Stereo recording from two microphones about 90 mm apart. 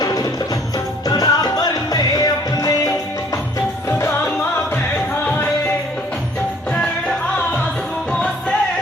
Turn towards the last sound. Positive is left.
turn(degrees=10)  # may be behind; listen again after turning